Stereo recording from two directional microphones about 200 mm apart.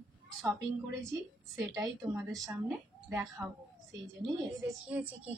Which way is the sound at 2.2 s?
Centre (ahead or behind).